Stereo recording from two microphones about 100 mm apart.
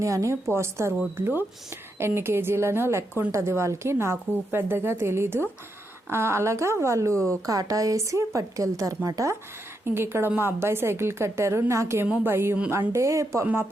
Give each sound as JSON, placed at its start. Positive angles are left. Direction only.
{"t": 0.0, "sound": "a woman's voice", "side_deg": -30}
{"t": 9.8, "sound": "a woman's voice", "side_deg": -25}
{"t": 12.0, "sound": "a woman's voice", "side_deg": -20}